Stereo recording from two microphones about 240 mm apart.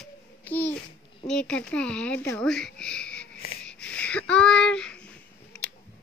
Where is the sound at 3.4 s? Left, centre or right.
Left.